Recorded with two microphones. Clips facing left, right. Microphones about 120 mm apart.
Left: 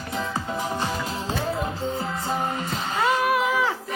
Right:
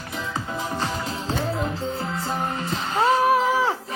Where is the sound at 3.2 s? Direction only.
30° right (ahead or behind).